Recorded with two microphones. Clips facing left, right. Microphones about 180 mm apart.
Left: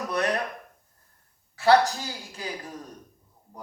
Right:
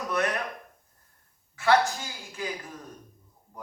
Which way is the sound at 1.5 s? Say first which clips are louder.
Left 3 dB; 35° left (ahead or behind).